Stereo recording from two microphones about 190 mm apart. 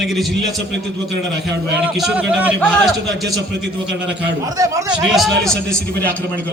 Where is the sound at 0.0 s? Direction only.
Centre (ahead or behind).